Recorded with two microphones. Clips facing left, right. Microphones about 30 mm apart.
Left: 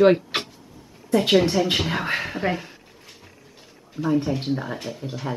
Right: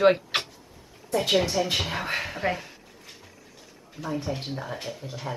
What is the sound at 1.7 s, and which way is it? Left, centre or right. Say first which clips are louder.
Speech: left 4 dB; centre.